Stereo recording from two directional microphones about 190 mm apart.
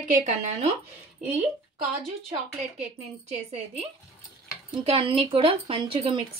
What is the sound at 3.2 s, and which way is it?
A woman's voice, 35° right (ahead or behind).